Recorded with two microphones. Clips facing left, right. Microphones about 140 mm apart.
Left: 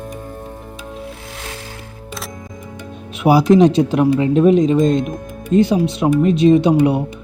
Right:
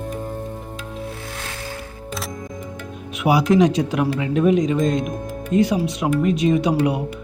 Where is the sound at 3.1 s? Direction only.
30° left (ahead or behind).